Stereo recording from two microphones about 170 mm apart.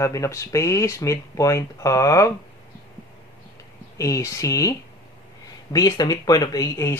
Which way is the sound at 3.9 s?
20° left (ahead or behind).